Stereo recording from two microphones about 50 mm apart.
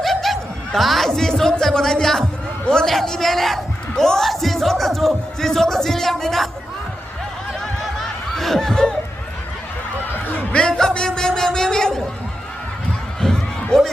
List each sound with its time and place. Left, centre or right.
0.0 s a man's voice: centre
4.3 s music: centre
7.8 s snicker: centre
10.1 s music: left
10.7 s speech: centre
13.2 s a sound: centre
13.7 s speech: centre